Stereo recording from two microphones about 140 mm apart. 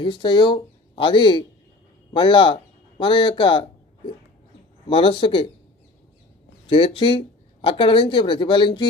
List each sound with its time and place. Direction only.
0.0 s speech: 35° left (ahead or behind)
6.7 s speech: 40° left (ahead or behind)